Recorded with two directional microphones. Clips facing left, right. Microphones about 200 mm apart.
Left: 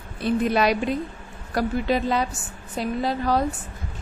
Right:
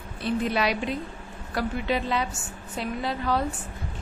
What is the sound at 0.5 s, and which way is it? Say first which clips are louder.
A woman's voice: left 5 dB; 45° left (ahead or behind).